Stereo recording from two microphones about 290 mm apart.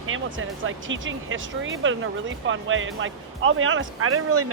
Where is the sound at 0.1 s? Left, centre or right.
Right.